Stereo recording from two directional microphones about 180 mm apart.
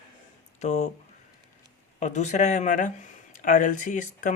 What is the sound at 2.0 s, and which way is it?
Speech, 40° left (ahead or behind).